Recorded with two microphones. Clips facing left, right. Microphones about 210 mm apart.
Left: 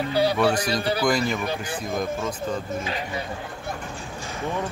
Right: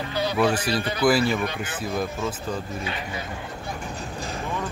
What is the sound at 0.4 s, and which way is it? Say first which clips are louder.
Speech: even; 5° right (ahead or behind).